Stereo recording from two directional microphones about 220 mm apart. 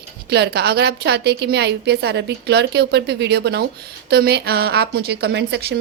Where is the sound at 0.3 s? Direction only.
50° right (ahead or behind).